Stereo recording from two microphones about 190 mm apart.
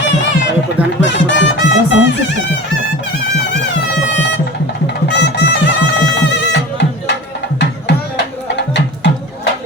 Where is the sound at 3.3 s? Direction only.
65° left (ahead or behind).